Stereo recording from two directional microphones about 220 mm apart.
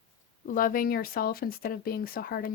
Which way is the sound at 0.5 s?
40° left (ahead or behind).